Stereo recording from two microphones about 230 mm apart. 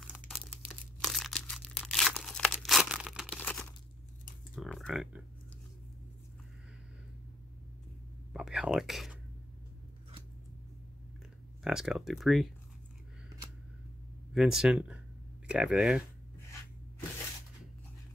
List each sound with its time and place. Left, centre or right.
0.0 s crumpling: centre
4.6 s speech: centre
8.3 s whispering: centre
11.6 s speech: centre
14.3 s speech: centre